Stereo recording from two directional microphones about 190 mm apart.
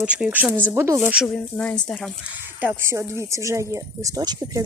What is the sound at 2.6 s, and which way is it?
Speech, 15° right (ahead or behind).